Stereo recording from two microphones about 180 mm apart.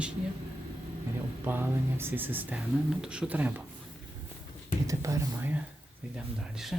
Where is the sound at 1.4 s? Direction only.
10° right (ahead or behind).